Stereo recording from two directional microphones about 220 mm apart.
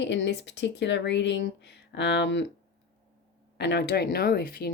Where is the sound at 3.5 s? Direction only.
50° left (ahead or behind).